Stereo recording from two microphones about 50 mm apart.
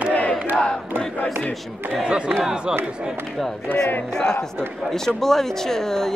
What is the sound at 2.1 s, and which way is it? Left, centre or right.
Speech, centre.